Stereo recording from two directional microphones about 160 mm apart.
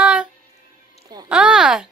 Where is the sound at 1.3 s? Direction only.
5° right (ahead or behind).